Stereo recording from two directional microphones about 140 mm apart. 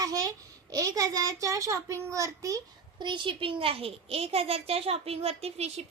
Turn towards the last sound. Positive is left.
turn(degrees=-50)  # may be behind; listen again after turning